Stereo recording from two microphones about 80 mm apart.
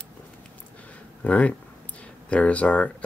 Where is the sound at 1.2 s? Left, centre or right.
Centre.